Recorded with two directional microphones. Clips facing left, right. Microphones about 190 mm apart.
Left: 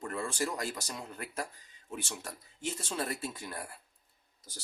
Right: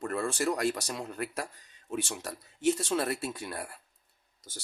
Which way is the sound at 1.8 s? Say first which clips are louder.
Right 6 dB; 85° right.